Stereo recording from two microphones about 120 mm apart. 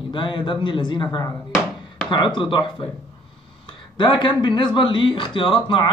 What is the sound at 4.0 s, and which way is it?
A man's voice, 40° left (ahead or behind).